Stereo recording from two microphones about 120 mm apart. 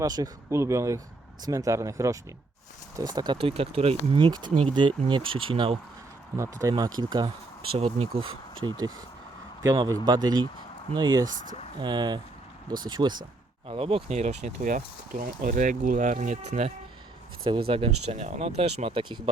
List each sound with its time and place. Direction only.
0.0 s speech: 30° right (ahead or behind)
3.4 s speech: 55° right (ahead or behind)
6.3 s speech: 25° right (ahead or behind)
7.7 s speech: 55° right (ahead or behind)
9.6 s speech: 30° right (ahead or behind)
11.3 s speech: 90° right
11.8 s speech: 40° right (ahead or behind)
13.7 s speech: 50° right (ahead or behind); by 16.7 s 70° right (ahead or behind)
17.4 s speech: 50° right (ahead or behind)